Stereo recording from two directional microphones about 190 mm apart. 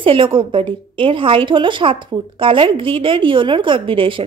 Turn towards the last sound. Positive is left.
turn(degrees=-25)  # may be behind; listen again after turning